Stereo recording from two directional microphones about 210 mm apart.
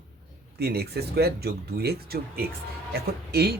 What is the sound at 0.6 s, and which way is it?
Speech, 50° right (ahead or behind).